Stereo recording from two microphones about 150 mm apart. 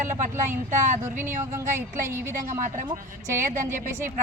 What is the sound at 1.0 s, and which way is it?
A woman's voice, 15° right (ahead or behind).